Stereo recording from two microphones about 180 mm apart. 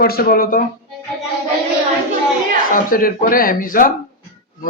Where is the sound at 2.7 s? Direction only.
50° left (ahead or behind).